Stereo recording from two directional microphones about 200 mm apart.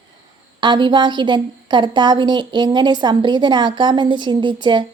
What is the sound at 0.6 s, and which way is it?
A woman's voice, 25° right (ahead or behind).